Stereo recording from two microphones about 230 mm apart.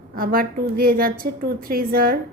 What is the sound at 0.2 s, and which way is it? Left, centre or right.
A woman's voice, right.